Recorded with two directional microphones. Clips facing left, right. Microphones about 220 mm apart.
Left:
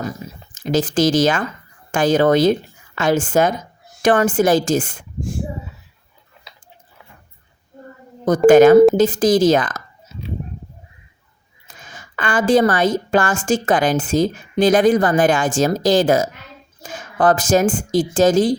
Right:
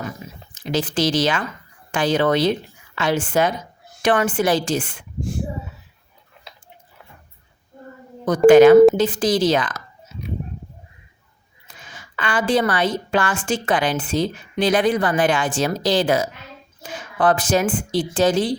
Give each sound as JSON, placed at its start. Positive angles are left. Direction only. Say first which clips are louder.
{"t": 0.5, "sound": "a woman's voice", "louder": "left 4 dB", "side_deg": 45}
{"t": 8.4, "sound": "a woman's voice", "louder": "even", "side_deg": 45}
{"t": 10.1, "sound": "a sound", "louder": "left 1 dB", "side_deg": 40}
{"t": 11.7, "sound": "a woman's voice", "louder": "left 2 dB", "side_deg": 45}